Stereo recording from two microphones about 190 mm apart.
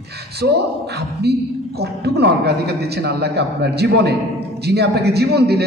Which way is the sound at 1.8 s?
60° right (ahead or behind).